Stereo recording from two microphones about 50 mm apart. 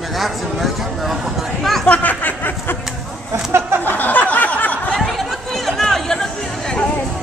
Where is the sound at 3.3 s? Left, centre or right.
Right.